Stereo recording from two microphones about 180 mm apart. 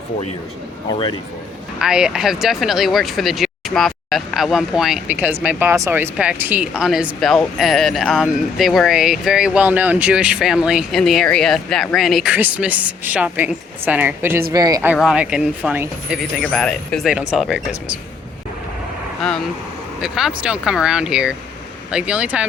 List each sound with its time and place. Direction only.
1.8 s speech: 5° right (ahead or behind)
14.9 s speech: 5° right (ahead or behind)
20.0 s speech: 5° right (ahead or behind)